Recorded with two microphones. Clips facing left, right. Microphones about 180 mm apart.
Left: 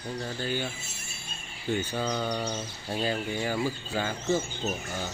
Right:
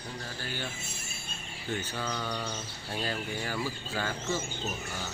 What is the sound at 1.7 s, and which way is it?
Speech, 20° left (ahead or behind).